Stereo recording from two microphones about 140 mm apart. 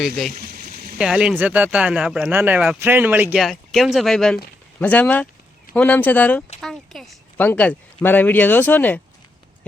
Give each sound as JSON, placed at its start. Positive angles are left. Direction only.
{"t": 0.3, "sound": "a sound", "side_deg": -85}
{"t": 0.9, "sound": "speech", "side_deg": -5}
{"t": 3.3, "sound": "speech", "side_deg": 0}
{"t": 7.3, "sound": "speech", "side_deg": 10}